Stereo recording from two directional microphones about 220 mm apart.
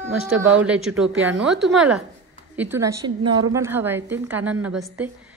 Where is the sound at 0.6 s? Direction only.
5° right (ahead or behind).